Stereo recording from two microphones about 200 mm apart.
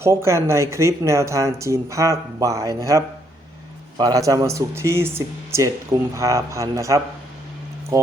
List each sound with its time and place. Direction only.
0.0 s speech: 15° right (ahead or behind)